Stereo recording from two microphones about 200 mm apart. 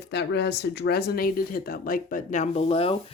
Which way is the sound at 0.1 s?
55° left (ahead or behind).